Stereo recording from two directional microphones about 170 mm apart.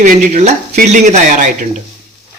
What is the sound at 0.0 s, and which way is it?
Speech, 40° right (ahead or behind).